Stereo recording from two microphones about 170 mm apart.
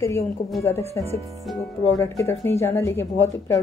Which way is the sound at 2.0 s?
15° left (ahead or behind).